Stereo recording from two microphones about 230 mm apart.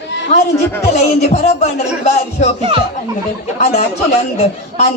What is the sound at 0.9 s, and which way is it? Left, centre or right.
Speech, left.